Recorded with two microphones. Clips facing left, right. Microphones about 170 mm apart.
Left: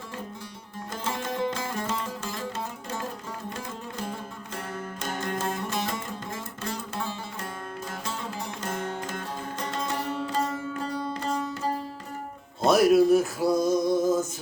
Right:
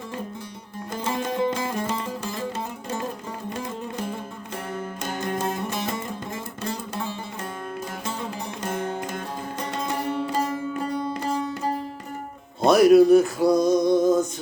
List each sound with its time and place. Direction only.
1.0 s music: 15° right (ahead or behind)
4.7 s music: 15° right (ahead or behind)
8.6 s music: 15° right (ahead or behind)
12.6 s male singing: centre (ahead or behind)